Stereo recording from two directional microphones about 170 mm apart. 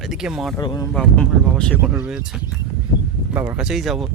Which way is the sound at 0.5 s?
25° left (ahead or behind).